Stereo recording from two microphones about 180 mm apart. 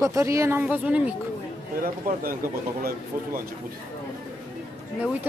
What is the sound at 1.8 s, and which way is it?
Speech, 50° right (ahead or behind).